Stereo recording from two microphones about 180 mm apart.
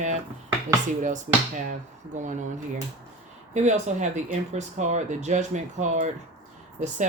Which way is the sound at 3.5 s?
40° right (ahead or behind).